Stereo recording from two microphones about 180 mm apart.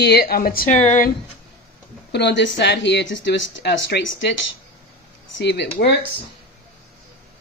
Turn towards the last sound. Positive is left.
turn(degrees=70)  # may be behind; listen again after turning